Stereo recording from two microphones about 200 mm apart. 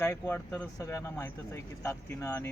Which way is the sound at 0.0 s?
10° left (ahead or behind).